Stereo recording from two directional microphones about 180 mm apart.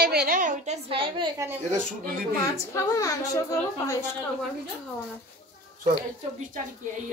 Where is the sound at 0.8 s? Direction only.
30° right (ahead or behind).